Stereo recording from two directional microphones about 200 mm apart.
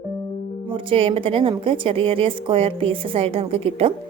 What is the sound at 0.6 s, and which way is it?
A woman's voice, 25° right (ahead or behind).